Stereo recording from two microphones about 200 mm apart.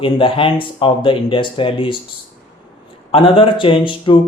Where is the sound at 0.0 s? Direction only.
25° left (ahead or behind).